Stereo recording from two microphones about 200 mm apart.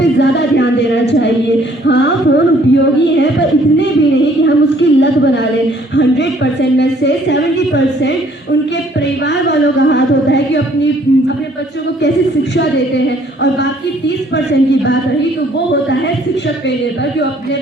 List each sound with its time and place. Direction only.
0.0 s music: 60° left (ahead or behind)
1.9 s a woman's voice: 60° left (ahead or behind)
9.0 s music: 60° left (ahead or behind)
13.1 s a sound: 60° left (ahead or behind)
14.3 s speech: 60° left (ahead or behind)